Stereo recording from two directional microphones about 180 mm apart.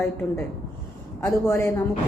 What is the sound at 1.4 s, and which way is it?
Speech, 15° left (ahead or behind).